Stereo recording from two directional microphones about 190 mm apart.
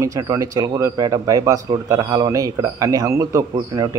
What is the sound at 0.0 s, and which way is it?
Speech, 15° right (ahead or behind).